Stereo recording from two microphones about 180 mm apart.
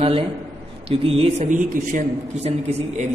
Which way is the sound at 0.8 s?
30° right (ahead or behind).